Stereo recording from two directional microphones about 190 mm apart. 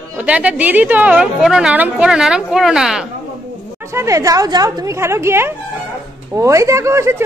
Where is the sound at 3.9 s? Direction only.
15° right (ahead or behind).